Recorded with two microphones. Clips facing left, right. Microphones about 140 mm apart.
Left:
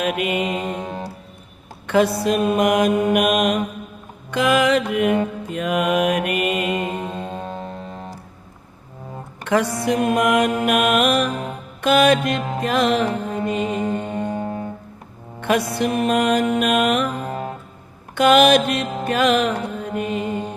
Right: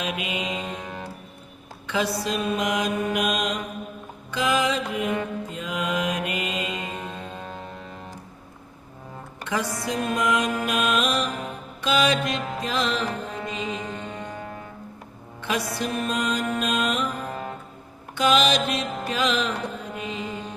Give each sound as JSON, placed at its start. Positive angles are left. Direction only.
{"t": 0.0, "sound": "mantra", "side_deg": 55}
{"t": 0.8, "sound": "music", "side_deg": 30}
{"t": 1.9, "sound": "mantra", "side_deg": 55}
{"t": 7.0, "sound": "music", "side_deg": 30}
{"t": 9.4, "sound": "mantra", "side_deg": 65}
{"t": 10.7, "sound": "music", "side_deg": 60}
{"t": 12.5, "sound": "mantra", "side_deg": 55}
{"t": 13.4, "sound": "music", "side_deg": 55}
{"t": 14.3, "sound": "music", "side_deg": 30}
{"t": 15.4, "sound": "music", "side_deg": 55}
{"t": 15.8, "sound": "mantra", "side_deg": 65}
{"t": 17.2, "sound": "music", "side_deg": 30}
{"t": 18.1, "sound": "music", "side_deg": 60}